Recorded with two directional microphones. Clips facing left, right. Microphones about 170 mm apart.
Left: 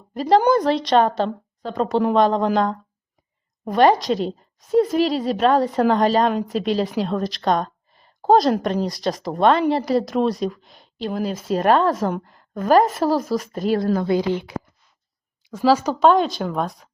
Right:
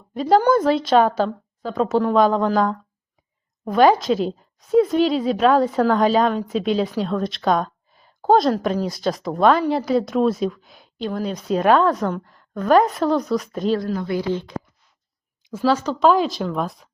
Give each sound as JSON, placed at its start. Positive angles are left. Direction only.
{"t": 0.1, "sound": "speech", "side_deg": 0}
{"t": 3.7, "sound": "a woman's voice", "side_deg": 0}
{"t": 13.7, "sound": "speech", "side_deg": 50}
{"t": 14.1, "sound": "speech", "side_deg": 15}
{"t": 15.5, "sound": "speech", "side_deg": 5}
{"t": 16.0, "sound": "speech", "side_deg": 0}